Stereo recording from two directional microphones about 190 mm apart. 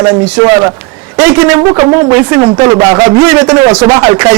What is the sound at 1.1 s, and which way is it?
A man's voice, 15° right (ahead or behind).